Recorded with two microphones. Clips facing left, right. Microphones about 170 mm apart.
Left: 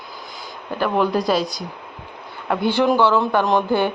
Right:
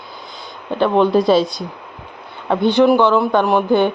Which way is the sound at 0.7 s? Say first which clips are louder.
Right 6 dB; 25° right (ahead or behind).